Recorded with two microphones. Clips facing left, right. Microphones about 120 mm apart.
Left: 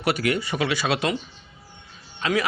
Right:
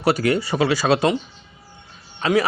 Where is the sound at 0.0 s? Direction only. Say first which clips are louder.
Right 5 dB; 35° right (ahead or behind).